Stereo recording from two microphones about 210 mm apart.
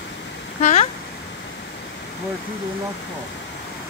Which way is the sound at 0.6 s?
30° left (ahead or behind).